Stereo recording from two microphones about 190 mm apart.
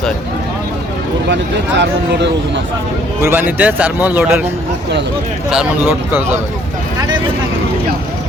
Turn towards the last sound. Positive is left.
turn(degrees=-10)  # may be behind; listen again after turning